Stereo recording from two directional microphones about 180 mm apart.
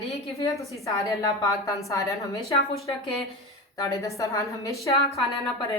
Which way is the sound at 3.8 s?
20° left (ahead or behind).